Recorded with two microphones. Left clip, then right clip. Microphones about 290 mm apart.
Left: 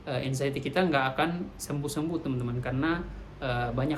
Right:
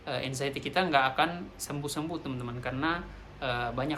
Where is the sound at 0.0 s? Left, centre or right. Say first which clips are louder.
Left 2 dB; centre.